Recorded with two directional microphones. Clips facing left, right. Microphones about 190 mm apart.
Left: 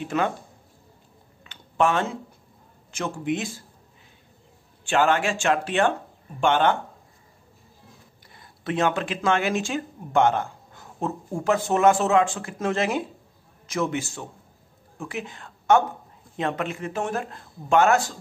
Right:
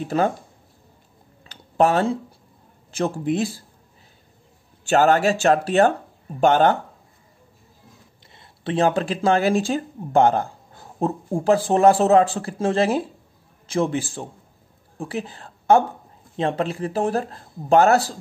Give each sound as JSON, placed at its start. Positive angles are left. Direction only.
{"t": 0.0, "sound": "speech", "side_deg": -35}
{"t": 1.4, "sound": "a sound", "side_deg": -35}
{"t": 2.9, "sound": "speech", "side_deg": -35}
{"t": 4.8, "sound": "speech", "side_deg": -40}
{"t": 8.4, "sound": "speech", "side_deg": -30}